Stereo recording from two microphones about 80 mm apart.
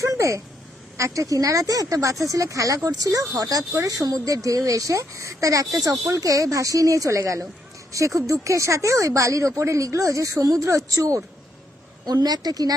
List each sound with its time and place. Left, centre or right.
0.0 s a sound: right
0.9 s speech: right
12.0 s a woman's voice: right